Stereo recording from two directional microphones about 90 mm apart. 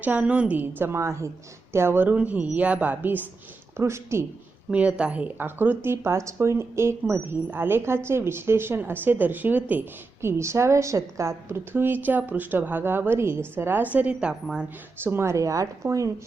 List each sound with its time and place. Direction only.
0.0 s a woman's voice: 15° right (ahead or behind)
3.8 s speech: 30° right (ahead or behind)
4.7 s speech: 15° right (ahead or behind)
10.2 s a woman's voice: 30° right (ahead or behind); by 14.7 s 10° right (ahead or behind)
15.0 s a woman's voice: 30° right (ahead or behind)